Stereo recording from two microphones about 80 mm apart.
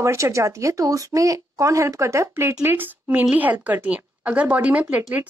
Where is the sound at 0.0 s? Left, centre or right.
Right.